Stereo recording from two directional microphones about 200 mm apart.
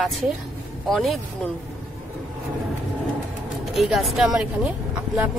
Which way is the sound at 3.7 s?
Centre (ahead or behind).